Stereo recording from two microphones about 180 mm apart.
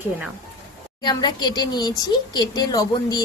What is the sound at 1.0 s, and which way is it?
Speech, 25° left (ahead or behind).